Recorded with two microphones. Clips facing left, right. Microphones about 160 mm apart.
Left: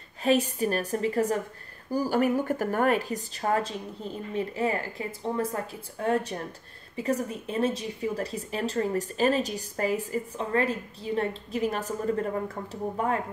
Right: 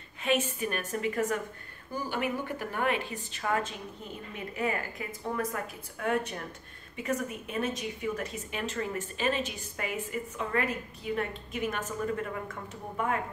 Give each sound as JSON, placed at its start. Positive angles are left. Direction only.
{"t": 0.2, "sound": "a woman's voice", "side_deg": 35}